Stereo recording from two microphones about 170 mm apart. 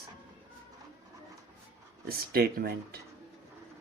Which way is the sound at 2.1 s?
60° right (ahead or behind).